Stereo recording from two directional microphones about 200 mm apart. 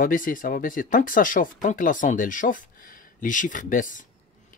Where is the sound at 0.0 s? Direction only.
45° left (ahead or behind).